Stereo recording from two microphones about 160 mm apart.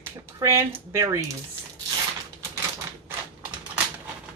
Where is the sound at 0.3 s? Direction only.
15° right (ahead or behind).